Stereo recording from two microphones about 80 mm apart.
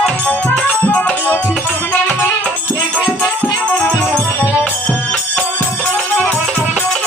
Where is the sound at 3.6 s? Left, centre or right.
Centre.